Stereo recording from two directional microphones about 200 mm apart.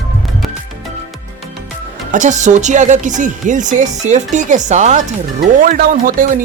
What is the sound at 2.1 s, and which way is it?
Speech, 35° right (ahead or behind).